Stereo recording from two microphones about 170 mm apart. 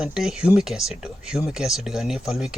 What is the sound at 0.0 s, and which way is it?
Speech, 5° right (ahead or behind).